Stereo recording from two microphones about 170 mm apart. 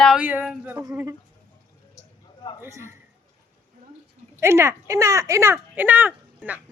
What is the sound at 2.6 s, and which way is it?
Speech, 15° right (ahead or behind).